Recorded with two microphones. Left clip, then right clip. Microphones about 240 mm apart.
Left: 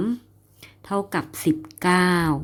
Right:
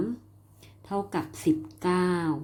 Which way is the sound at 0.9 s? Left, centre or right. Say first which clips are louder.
Left 5 dB; left.